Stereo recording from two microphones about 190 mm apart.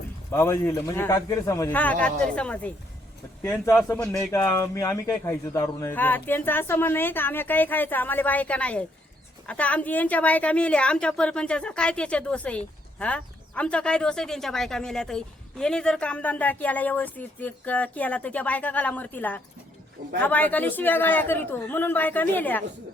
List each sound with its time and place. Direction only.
0.3 s a woman's voice: 15° left (ahead or behind)